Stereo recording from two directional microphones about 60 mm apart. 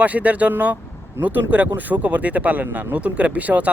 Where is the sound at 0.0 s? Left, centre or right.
Right.